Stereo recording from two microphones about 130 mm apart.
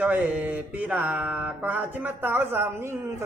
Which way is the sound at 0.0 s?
10° right (ahead or behind).